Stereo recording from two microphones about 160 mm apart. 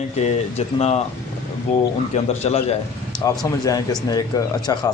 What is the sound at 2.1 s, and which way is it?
Speech, 45° left (ahead or behind).